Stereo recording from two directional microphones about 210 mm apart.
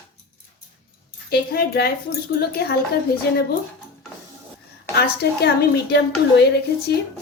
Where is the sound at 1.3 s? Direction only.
50° left (ahead or behind).